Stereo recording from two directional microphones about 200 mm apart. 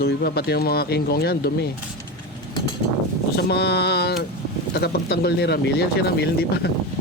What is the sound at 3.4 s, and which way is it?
Speech, 55° left (ahead or behind).